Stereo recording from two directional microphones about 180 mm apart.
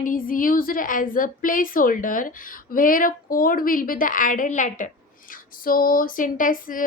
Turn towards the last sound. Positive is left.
turn(degrees=50)  # may be behind; listen again after turning